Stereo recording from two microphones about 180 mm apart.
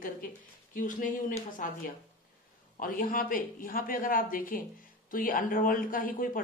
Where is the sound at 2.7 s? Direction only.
50° left (ahead or behind).